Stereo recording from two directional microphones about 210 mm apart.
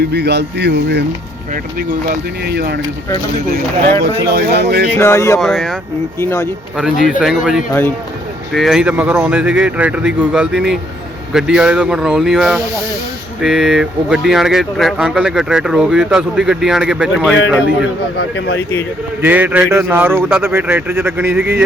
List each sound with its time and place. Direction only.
0.0 s speech: 50° right (ahead or behind)
2.0 s speech: 50° right (ahead or behind)
4.0 s speech: 50° right (ahead or behind)
4.9 s speech: 10° left (ahead or behind)
5.4 s speech: centre (ahead or behind)
6.1 s speech: 10° left (ahead or behind)
7.2 s speech: 5° right (ahead or behind)
7.7 s speech: 10° left (ahead or behind)
8.5 s speech: centre (ahead or behind)
18.2 s speech: 55° left (ahead or behind)
19.2 s a man's voice: 5° right (ahead or behind)